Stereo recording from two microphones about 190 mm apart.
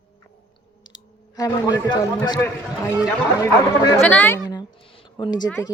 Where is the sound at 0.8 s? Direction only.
20° left (ahead or behind).